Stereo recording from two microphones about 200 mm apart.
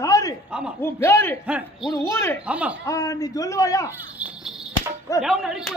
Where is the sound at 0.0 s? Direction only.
15° left (ahead or behind).